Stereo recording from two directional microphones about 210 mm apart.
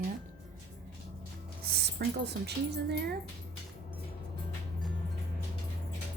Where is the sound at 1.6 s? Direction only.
50° right (ahead or behind).